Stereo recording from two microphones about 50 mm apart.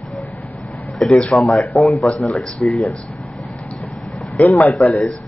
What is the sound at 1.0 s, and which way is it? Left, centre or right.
Speech, centre.